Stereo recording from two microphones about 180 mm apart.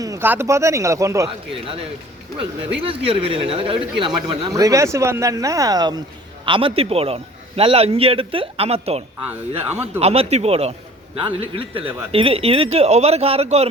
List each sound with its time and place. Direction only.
0.0 s speech: 15° right (ahead or behind)
2.8 s a man's voice: 30° right (ahead or behind)
9.6 s speech: 10° right (ahead or behind)
10.0 s a man's voice: 35° right (ahead or behind)